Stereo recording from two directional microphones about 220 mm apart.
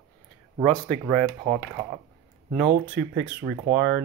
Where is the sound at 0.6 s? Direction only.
5° left (ahead or behind).